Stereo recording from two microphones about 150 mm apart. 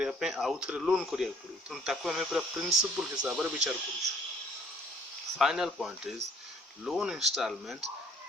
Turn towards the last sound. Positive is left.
turn(degrees=0)  # may be behind; listen again after turning